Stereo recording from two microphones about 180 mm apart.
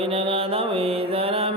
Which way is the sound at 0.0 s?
30° right (ahead or behind).